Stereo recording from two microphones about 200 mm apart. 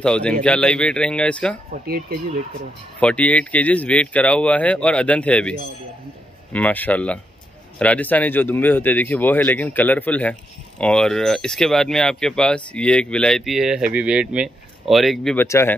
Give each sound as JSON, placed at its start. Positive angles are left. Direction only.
{"t": 0.0, "sound": "speech", "side_deg": 5}
{"t": 1.7, "sound": "speech", "side_deg": -50}
{"t": 3.0, "sound": "speech", "side_deg": 5}
{"t": 15.3, "sound": "speech", "side_deg": 10}